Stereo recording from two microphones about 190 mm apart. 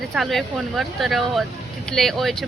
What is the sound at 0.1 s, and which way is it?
Speech, centre (ahead or behind).